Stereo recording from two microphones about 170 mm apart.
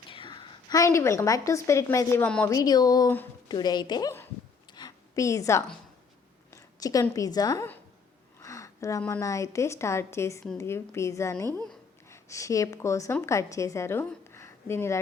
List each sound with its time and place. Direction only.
0.1 s a woman's voice: 30° left (ahead or behind); by 2.5 s 10° left (ahead or behind)
2.5 s speech: 20° left (ahead or behind)
4.7 s a sound: 25° left (ahead or behind)
6.5 s speech: 20° left (ahead or behind)
8.4 s a sound: 20° left (ahead or behind)
9.2 s a woman's voice: 20° left (ahead or behind)